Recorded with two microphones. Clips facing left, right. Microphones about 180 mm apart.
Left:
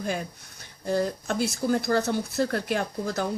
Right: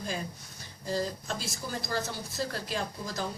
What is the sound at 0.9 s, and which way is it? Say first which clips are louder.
Speech: left 6 dB; 60° left (ahead or behind).